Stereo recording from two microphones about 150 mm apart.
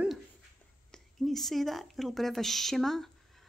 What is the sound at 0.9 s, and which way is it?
A woman's voice, centre (ahead or behind).